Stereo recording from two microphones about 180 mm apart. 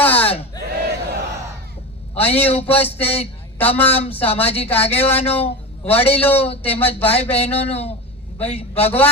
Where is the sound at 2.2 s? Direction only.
35° left (ahead or behind).